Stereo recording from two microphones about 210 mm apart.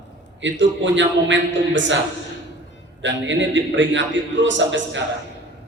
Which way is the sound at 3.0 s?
60° right (ahead or behind).